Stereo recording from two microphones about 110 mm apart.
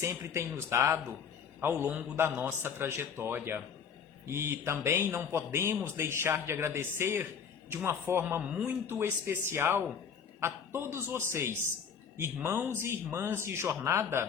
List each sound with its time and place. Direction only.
0.0 s speech: 25° right (ahead or behind)
8.4 s speech: 10° right (ahead or behind)